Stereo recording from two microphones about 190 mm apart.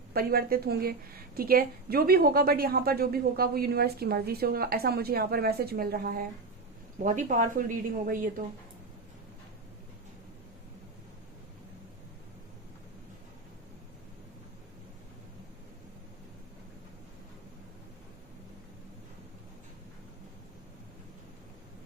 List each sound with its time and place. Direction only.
0.1 s a woman's voice: 55° right (ahead or behind)
7.0 s a woman's voice: 40° right (ahead or behind)